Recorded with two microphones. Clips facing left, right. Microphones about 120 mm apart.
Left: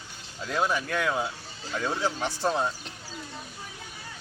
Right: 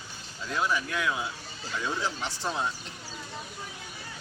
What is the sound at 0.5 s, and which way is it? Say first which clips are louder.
Speech: left 2 dB; 50° left (ahead or behind).